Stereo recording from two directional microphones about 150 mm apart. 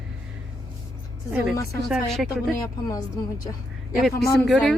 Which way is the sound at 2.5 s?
25° left (ahead or behind).